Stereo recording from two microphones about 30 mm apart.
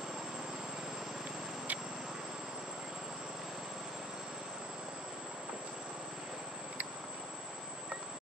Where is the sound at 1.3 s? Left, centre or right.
Centre.